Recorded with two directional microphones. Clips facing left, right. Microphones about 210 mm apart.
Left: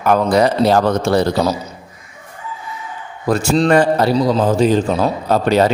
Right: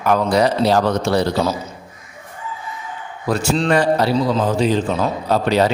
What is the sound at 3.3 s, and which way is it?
A man's voice, 45° left (ahead or behind).